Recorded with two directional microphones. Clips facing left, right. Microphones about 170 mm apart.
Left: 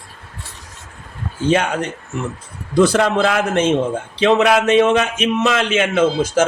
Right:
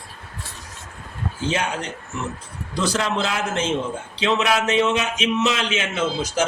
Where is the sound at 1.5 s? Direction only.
55° left (ahead or behind).